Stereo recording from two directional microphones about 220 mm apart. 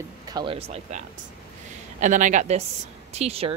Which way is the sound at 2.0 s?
35° right (ahead or behind).